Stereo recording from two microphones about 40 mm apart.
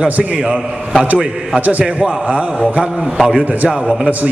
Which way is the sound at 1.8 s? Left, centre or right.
Right.